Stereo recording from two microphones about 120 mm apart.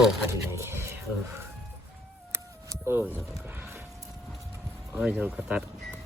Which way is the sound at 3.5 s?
15° right (ahead or behind).